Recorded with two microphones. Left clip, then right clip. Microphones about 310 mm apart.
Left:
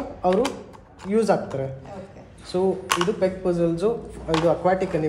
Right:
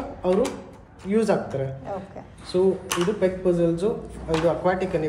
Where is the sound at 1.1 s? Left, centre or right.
Left.